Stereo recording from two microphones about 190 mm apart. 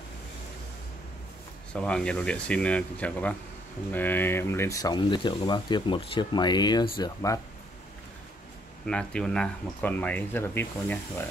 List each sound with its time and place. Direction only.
1.7 s speech: 5° left (ahead or behind)
8.8 s speech: 5° left (ahead or behind)